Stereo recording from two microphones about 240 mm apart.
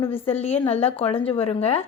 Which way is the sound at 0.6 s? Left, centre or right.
Left.